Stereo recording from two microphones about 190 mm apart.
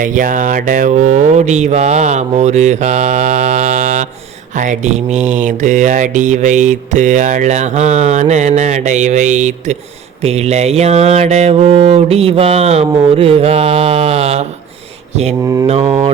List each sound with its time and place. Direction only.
0.0 s mantra: 45° right (ahead or behind)